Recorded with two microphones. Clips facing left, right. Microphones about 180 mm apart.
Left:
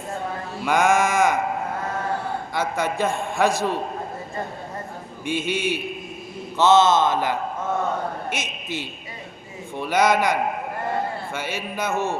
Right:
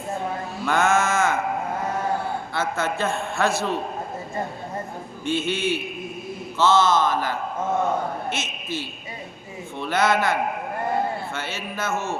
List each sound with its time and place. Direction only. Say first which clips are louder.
0.6 s sheep: left 2 dB; 10° left (ahead or behind)
2.5 s a man's voice: left 2 dB; 15° left (ahead or behind)
5.2 s a man's voice: even; 10° left (ahead or behind)
11.3 s a man's voice: left 2 dB; 10° left (ahead or behind)